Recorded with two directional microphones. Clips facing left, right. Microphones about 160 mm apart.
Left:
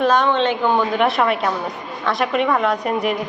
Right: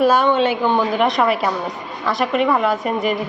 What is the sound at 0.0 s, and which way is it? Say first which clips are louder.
Speech: right 2 dB; 10° right (ahead or behind).